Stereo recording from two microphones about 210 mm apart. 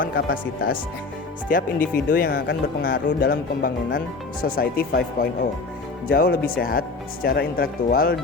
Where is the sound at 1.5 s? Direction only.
40° left (ahead or behind).